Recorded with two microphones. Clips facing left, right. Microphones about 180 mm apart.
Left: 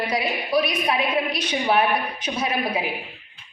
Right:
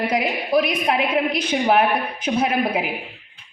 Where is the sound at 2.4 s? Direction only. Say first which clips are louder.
Right 4 dB; 60° right (ahead or behind).